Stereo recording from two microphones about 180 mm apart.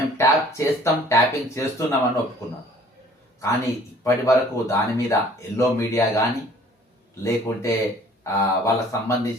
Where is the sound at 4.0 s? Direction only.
15° left (ahead or behind).